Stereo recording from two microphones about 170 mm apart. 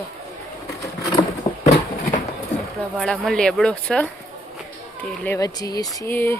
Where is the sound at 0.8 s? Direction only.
20° left (ahead or behind).